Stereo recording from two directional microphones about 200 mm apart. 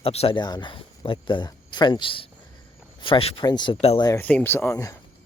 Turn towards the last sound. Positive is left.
turn(degrees=15)  # may be behind; listen again after turning